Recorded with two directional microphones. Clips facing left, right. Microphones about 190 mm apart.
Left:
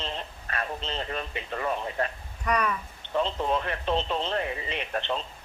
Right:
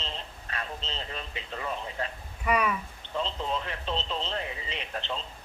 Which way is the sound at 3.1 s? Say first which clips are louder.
Left 5 dB; 60° left (ahead or behind).